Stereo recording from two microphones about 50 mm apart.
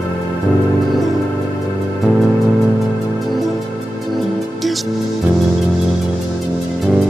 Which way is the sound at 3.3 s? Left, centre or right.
Centre.